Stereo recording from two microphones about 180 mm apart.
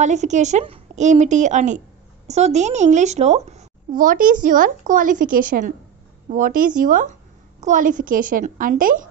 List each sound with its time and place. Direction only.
0.0 s a woman's voice: 40° right (ahead or behind)